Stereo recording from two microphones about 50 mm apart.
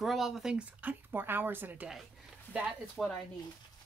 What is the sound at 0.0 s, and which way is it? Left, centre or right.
Speech, centre.